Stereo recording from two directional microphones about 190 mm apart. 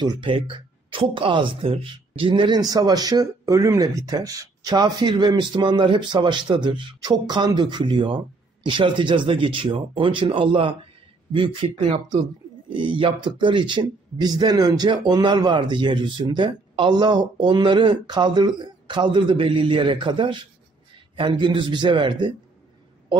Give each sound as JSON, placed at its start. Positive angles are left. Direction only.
{"t": 0.0, "sound": "speech", "side_deg": -25}